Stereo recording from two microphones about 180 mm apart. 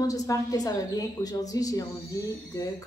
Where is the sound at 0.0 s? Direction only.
20° left (ahead or behind).